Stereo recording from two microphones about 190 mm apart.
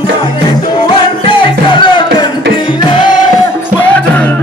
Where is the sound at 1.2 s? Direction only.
25° left (ahead or behind).